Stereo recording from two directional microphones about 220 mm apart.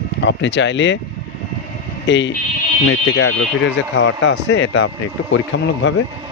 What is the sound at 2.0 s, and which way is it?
Speech, 55° left (ahead or behind).